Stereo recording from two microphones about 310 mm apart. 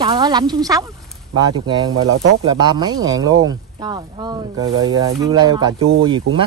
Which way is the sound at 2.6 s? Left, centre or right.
Centre.